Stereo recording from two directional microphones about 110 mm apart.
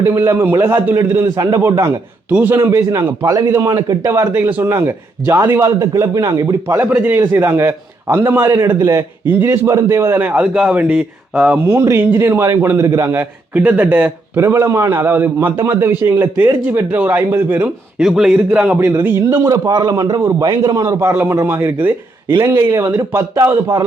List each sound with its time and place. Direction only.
0.0 s a man's voice: 20° right (ahead or behind)
0.9 s a man's voice: 30° right (ahead or behind)
2.3 s a man's voice: 15° right (ahead or behind)
2.6 s a man's voice: 25° right (ahead or behind)
4.1 s a man's voice: 20° right (ahead or behind)
13.5 s speech: 10° right (ahead or behind)
14.4 s a man's voice: 25° right (ahead or behind)
17.9 s a man's voice: 5° right (ahead or behind)
18.8 s a man's voice: 25° right (ahead or behind)